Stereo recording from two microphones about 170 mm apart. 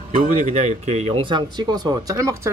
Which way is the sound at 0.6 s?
40° right (ahead or behind).